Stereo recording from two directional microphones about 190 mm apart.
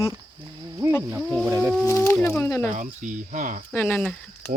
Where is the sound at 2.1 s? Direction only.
5° left (ahead or behind).